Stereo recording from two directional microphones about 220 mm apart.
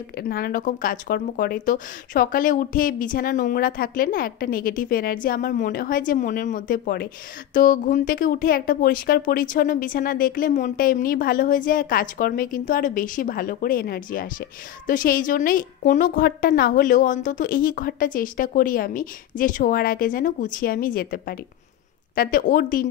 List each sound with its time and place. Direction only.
0.2 s speech: 40° left (ahead or behind)